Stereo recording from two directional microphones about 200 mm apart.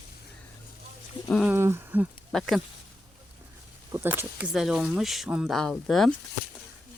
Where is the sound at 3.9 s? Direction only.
10° right (ahead or behind).